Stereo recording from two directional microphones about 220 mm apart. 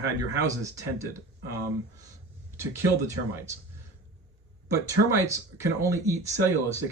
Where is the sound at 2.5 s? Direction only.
10° right (ahead or behind).